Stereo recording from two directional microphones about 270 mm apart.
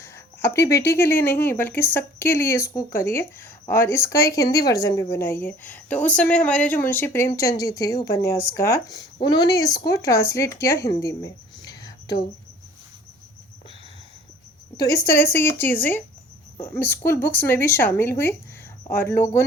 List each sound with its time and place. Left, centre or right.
0.0 s speech: centre
14.8 s speech: centre